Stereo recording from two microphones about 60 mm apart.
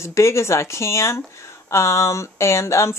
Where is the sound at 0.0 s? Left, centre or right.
Left.